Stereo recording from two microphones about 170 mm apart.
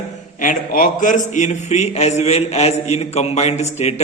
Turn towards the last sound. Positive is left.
turn(degrees=40)  # may be behind; listen again after turning